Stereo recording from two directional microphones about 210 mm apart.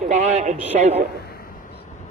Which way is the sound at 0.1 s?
35° right (ahead or behind).